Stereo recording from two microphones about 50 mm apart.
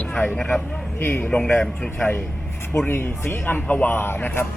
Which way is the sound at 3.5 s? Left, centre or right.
Left.